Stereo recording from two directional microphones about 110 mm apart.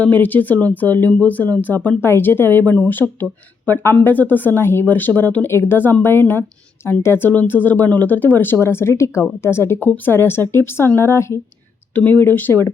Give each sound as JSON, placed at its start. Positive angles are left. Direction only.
{"t": 0.0, "sound": "speech", "side_deg": 15}